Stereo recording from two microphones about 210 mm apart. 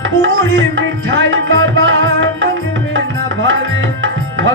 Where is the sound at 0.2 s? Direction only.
65° right (ahead or behind).